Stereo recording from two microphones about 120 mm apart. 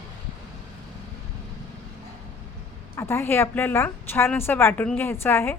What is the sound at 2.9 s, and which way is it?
A woman's voice, 20° left (ahead or behind).